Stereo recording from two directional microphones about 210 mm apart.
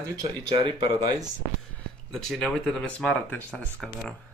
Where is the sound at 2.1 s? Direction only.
5° left (ahead or behind).